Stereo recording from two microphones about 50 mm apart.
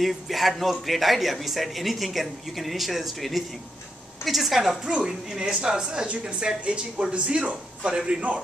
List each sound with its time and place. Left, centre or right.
0.0 s a man's voice: centre